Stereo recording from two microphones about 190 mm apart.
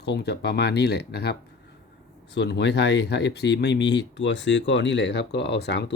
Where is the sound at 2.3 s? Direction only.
65° left (ahead or behind).